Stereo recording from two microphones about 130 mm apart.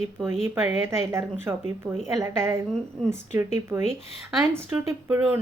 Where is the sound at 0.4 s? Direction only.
20° right (ahead or behind).